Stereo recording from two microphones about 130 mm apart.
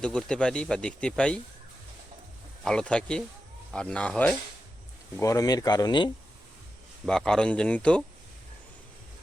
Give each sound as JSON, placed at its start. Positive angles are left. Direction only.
{"t": 0.0, "sound": "speech", "side_deg": 5}
{"t": 2.6, "sound": "speech", "side_deg": 5}
{"t": 5.2, "sound": "speech", "side_deg": 25}
{"t": 7.1, "sound": "speech", "side_deg": 5}